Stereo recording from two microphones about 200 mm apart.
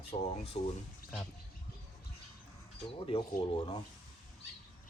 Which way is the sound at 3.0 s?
25° left (ahead or behind).